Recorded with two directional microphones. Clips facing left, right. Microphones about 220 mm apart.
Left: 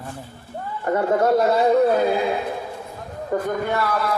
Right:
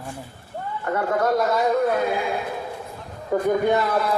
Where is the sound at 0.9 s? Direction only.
25° left (ahead or behind).